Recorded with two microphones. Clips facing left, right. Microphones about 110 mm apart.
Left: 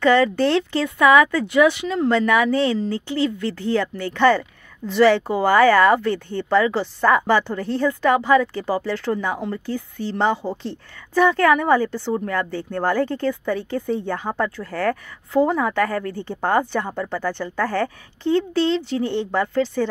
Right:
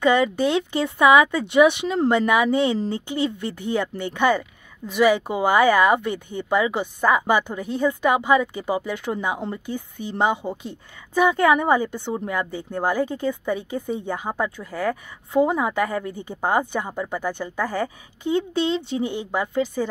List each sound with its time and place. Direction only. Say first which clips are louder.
0.0 s speech: left 2 dB; 15° right (ahead or behind)